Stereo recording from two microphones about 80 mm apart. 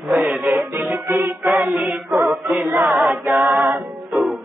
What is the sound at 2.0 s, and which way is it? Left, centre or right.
A capella, centre.